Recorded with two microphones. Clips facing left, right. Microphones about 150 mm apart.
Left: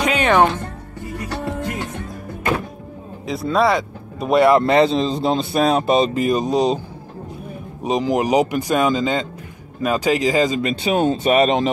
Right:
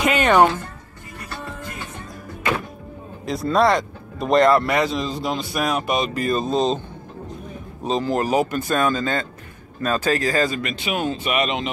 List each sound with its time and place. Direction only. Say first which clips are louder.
0.0 s music: even; centre (ahead or behind)
1.2 s music: left 8 dB; 80° left
3.3 s speech: even; centre (ahead or behind)
4.6 s speech: left 6 dB; 25° left (ahead or behind); by 6.8 s 10° left (ahead or behind)
7.8 s speech: left 3 dB; 15° left (ahead or behind)
10.6 s speech: left 7 dB; 30° left (ahead or behind)